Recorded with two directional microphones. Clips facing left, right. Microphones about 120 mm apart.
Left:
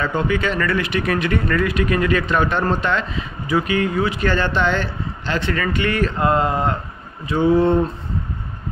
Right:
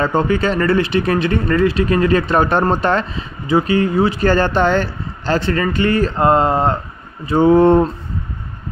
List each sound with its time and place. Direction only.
0.0 s speech: 35° right (ahead or behind)
7.4 s speech: 55° right (ahead or behind)